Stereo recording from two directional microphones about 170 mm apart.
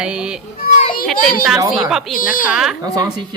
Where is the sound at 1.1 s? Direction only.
55° left (ahead or behind).